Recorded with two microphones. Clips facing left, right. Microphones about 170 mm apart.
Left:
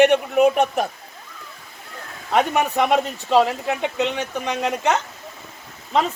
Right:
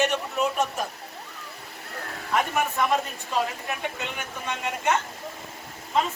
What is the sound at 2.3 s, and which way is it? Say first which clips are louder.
Speech: left 6 dB; 85° left.